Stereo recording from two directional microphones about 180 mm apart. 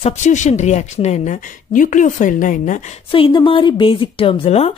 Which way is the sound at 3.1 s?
30° left (ahead or behind).